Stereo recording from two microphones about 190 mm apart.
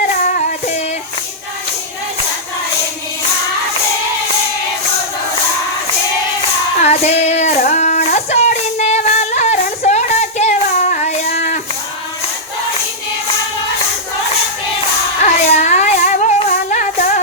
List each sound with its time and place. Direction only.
0.3 s child singing: 45° left (ahead or behind)
6.8 s child singing: 35° left (ahead or behind)
15.2 s a sound: 40° left (ahead or behind)